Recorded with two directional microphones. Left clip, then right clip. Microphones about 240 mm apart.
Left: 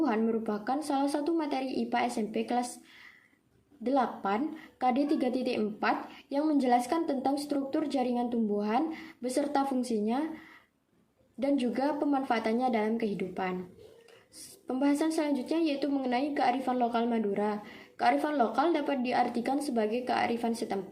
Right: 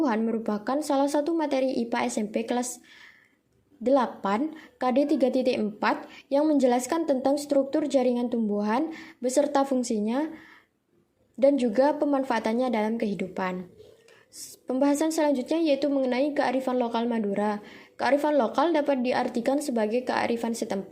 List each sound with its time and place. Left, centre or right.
0.0 s a woman's voice: right
3.8 s a woman's voice: right
11.3 s a woman's voice: right
14.7 s a woman's voice: right